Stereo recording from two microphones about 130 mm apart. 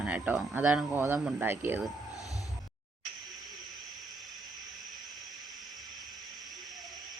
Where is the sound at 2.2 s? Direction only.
25° left (ahead or behind).